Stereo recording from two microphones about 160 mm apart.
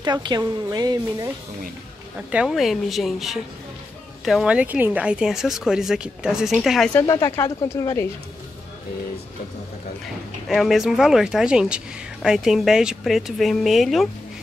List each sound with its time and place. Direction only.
0.0 s a woman's voice: 25° right (ahead or behind)
2.1 s speech: 5° right (ahead or behind)
7.1 s speech: 20° left (ahead or behind)
10.5 s speech: centre (ahead or behind)